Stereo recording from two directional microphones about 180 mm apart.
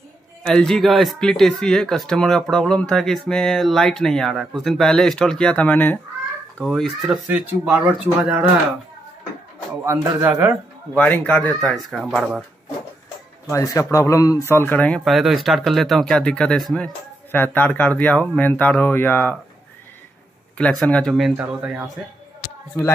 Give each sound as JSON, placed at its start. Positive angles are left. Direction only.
{"t": 0.5, "sound": "speech", "side_deg": 5}
{"t": 9.8, "sound": "a man's voice", "side_deg": -15}
{"t": 11.0, "sound": "speech", "side_deg": 10}
{"t": 13.5, "sound": "speech", "side_deg": 15}
{"t": 20.5, "sound": "speech", "side_deg": 5}
{"t": 21.4, "sound": "a man's voice", "side_deg": -10}